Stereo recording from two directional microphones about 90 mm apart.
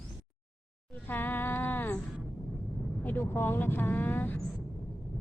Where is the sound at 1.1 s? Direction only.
20° left (ahead or behind).